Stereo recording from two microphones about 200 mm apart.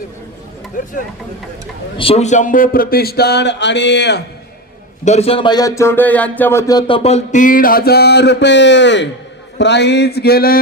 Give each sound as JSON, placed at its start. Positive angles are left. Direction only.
{"t": 2.0, "sound": "speech", "side_deg": 30}
{"t": 5.0, "sound": "speech", "side_deg": 30}
{"t": 9.6, "sound": "a sound", "side_deg": 60}